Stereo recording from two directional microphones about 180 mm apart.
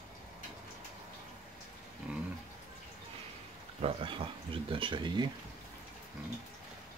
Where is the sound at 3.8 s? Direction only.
30° right (ahead or behind).